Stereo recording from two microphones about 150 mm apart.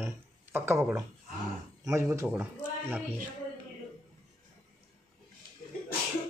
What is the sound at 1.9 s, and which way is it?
Speech, 20° right (ahead or behind).